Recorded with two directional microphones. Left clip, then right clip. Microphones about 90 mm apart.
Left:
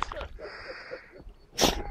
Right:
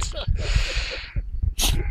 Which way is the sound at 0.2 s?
70° right (ahead or behind).